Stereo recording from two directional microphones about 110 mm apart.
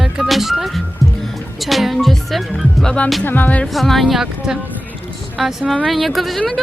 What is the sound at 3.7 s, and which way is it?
Speech, centre (ahead or behind).